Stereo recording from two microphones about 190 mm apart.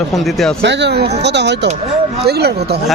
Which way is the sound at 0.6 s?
65° right (ahead or behind).